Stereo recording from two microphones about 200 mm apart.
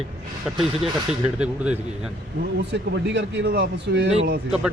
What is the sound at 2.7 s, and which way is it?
Speech, 60° right (ahead or behind).